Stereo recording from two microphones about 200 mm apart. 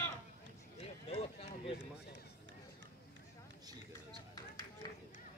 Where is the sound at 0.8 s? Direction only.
30° left (ahead or behind).